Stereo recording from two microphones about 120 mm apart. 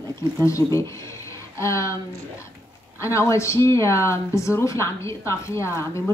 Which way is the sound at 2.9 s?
25° left (ahead or behind).